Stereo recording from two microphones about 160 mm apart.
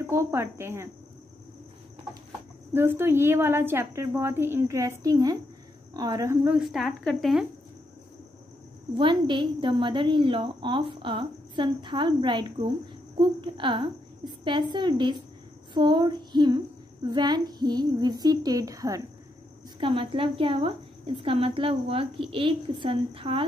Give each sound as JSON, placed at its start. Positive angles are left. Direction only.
{"t": 0.0, "sound": "a woman's voice", "side_deg": -15}
{"t": 2.7, "sound": "a woman's voice", "side_deg": -15}
{"t": 6.4, "sound": "speech", "side_deg": -5}
{"t": 8.9, "sound": "a woman's voice", "side_deg": -30}
{"t": 19.8, "sound": "a woman's voice", "side_deg": -35}